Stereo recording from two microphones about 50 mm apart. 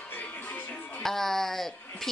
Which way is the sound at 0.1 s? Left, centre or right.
Left.